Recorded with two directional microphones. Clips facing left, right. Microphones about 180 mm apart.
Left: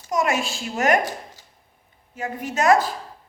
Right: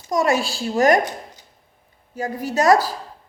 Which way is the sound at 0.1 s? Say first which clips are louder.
Right 3 dB; 35° right (ahead or behind).